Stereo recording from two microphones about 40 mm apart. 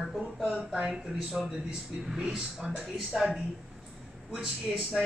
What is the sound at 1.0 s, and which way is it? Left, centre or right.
Speech, centre.